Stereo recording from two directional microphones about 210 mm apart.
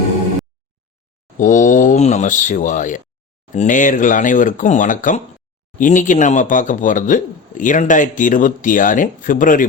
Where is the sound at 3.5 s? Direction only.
35° left (ahead or behind).